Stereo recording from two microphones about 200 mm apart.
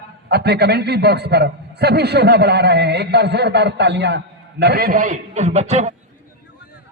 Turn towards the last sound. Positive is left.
turn(degrees=-35)  # may be behind; listen again after turning